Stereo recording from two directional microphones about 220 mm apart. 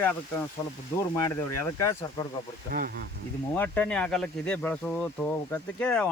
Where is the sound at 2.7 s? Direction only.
40° right (ahead or behind).